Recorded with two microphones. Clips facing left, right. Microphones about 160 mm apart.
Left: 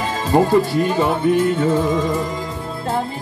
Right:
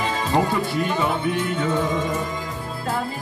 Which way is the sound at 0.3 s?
40° left (ahead or behind).